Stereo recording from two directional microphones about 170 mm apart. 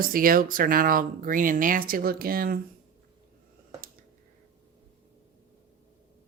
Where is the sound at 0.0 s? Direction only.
55° right (ahead or behind).